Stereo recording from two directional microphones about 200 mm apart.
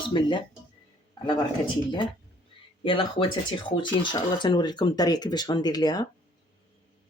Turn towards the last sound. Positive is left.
turn(degrees=20)  # may be behind; listen again after turning